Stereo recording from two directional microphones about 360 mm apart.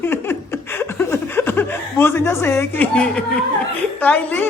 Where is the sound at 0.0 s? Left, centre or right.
Centre.